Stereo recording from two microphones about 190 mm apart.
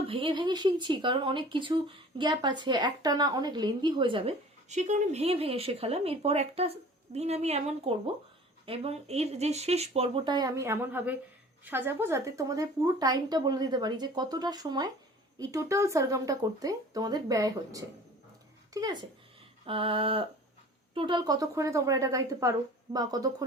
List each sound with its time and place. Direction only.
0.1 s speech: 25° right (ahead or behind)